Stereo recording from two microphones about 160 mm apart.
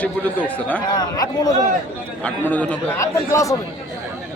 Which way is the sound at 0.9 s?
25° left (ahead or behind).